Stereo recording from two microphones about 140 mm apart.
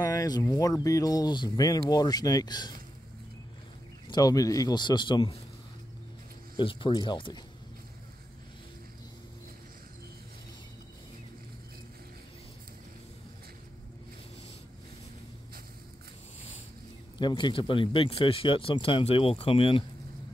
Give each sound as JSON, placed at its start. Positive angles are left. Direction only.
{"t": 0.0, "sound": "speech", "side_deg": 25}
{"t": 4.1, "sound": "speech", "side_deg": 25}
{"t": 6.5, "sound": "speech", "side_deg": 35}
{"t": 17.2, "sound": "speech", "side_deg": 35}